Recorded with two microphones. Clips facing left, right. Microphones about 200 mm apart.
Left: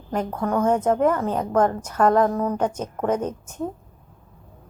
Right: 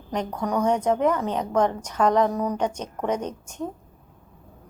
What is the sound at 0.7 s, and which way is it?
A woman's voice, 5° left (ahead or behind).